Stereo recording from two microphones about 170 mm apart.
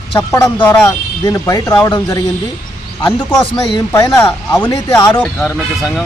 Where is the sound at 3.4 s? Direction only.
25° left (ahead or behind).